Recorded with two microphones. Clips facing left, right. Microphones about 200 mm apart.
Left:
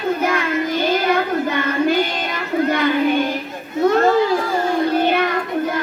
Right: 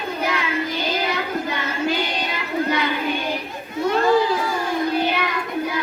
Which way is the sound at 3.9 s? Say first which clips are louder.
Left 2 dB; 50° left (ahead or behind).